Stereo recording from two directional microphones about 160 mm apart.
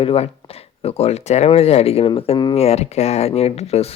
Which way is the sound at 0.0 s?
35° left (ahead or behind).